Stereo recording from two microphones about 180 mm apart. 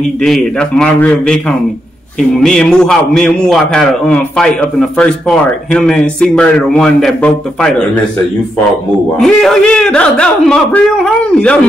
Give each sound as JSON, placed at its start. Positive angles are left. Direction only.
{"t": 0.2, "sound": "a man's voice", "side_deg": 5}
{"t": 9.2, "sound": "a man's voice", "side_deg": 0}